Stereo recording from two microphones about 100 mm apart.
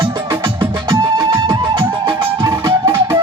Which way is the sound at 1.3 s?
55° right (ahead or behind).